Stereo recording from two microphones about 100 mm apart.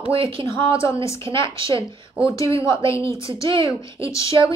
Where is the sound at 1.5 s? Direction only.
60° right (ahead or behind).